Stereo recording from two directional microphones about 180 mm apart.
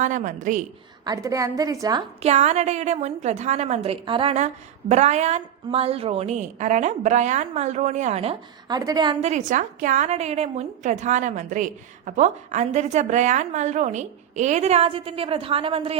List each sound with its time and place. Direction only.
0.0 s a woman's voice: 45° right (ahead or behind)
1.0 s a woman's voice: 20° right (ahead or behind)
2.2 s a woman's voice: 40° right (ahead or behind)
9.2 s a woman's voice: 40° right (ahead or behind)